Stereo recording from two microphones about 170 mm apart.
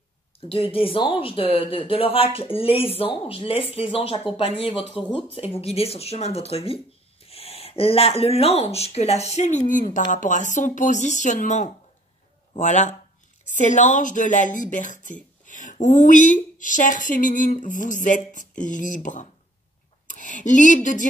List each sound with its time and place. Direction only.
0.5 s speech: 35° left (ahead or behind)